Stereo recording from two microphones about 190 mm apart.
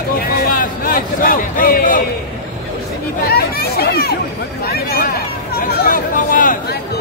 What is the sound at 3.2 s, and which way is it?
Chatter, 55° left (ahead or behind).